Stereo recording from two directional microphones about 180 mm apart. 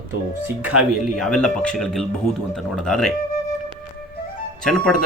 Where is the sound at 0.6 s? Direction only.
5° right (ahead or behind).